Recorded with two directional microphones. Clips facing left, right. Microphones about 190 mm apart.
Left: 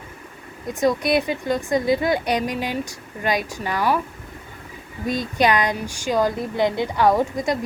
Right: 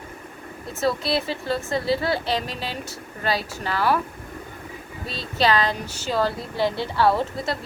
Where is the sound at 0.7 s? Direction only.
15° left (ahead or behind).